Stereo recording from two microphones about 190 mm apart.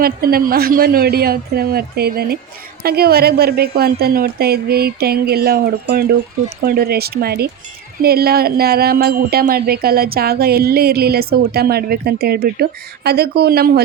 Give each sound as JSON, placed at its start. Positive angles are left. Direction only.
{"t": 0.0, "sound": "a woman's voice", "side_deg": -50}